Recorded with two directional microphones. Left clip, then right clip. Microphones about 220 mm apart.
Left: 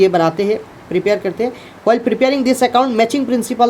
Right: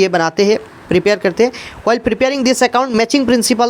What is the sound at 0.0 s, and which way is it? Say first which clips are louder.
Speech: even; 20° right (ahead or behind).